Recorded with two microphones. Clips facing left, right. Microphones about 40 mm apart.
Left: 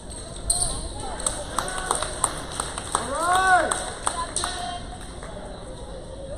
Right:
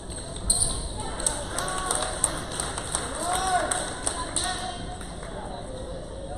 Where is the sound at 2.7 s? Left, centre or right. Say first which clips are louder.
Left 5 dB; centre.